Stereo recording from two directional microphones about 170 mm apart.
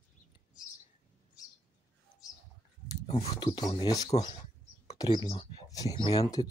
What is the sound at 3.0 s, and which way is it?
Speech, 35° left (ahead or behind).